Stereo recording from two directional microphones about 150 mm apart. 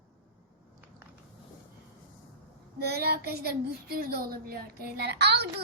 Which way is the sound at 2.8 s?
90° right.